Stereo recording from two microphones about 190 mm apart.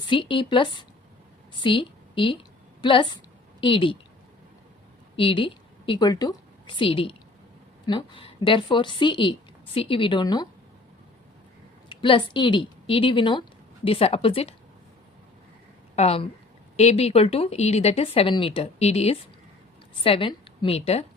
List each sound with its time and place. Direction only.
0.1 s a woman's voice: 25° left (ahead or behind)
5.1 s a woman's voice: 25° left (ahead or behind)
11.9 s a woman's voice: 25° left (ahead or behind)
16.0 s speech: 30° left (ahead or behind)